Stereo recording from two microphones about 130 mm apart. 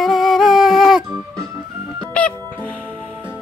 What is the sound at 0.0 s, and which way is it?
Music, centre (ahead or behind).